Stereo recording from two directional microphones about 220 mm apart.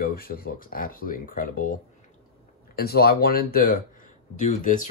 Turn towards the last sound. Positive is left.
turn(degrees=35)  # may be behind; listen again after turning